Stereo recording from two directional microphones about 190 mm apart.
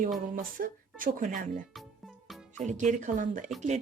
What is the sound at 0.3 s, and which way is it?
Speech, 45° right (ahead or behind).